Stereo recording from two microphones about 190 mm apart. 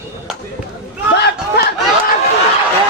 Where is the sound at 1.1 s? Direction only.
60° left (ahead or behind).